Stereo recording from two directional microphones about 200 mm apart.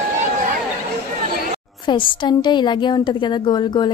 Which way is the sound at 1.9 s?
25° left (ahead or behind).